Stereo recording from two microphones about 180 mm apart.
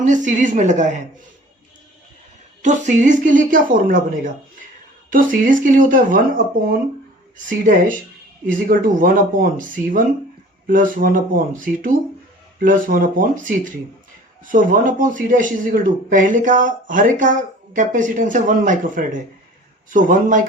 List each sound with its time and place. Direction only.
0.0 s a man's voice: 45° right (ahead or behind)
2.6 s a man's voice: 40° right (ahead or behind)